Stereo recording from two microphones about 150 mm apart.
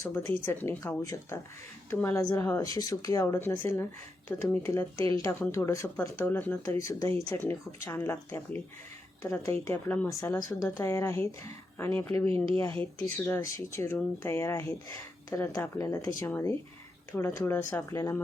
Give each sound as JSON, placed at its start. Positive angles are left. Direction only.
{"t": 0.4, "sound": "speech", "side_deg": 10}
{"t": 1.9, "sound": "speech", "side_deg": 10}
{"t": 5.1, "sound": "speech", "side_deg": 25}
{"t": 12.3, "sound": "speech", "side_deg": -35}
{"t": 13.1, "sound": "speech", "side_deg": 15}